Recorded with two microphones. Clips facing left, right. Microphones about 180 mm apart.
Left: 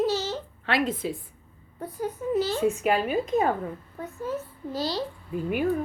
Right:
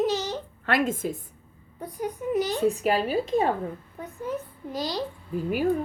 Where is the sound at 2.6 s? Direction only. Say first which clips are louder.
Even; 35° right (ahead or behind).